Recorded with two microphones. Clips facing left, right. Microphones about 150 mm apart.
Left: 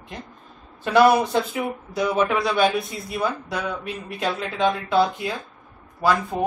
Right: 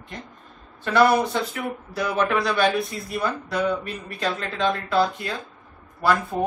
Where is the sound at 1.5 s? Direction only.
10° left (ahead or behind).